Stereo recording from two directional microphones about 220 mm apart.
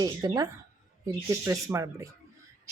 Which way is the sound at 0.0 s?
15° right (ahead or behind).